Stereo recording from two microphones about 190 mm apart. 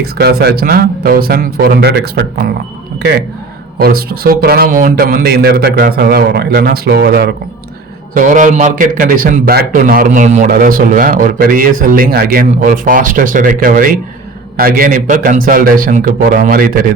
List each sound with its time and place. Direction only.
0.2 s speech: 55° right (ahead or behind)
8.1 s speech: 45° right (ahead or behind)